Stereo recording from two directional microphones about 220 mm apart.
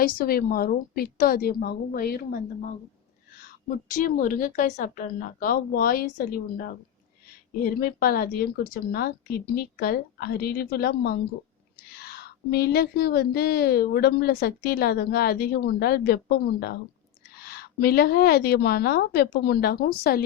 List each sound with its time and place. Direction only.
0.0 s a woman's voice: 40° left (ahead or behind)
3.9 s a woman's voice: 35° left (ahead or behind)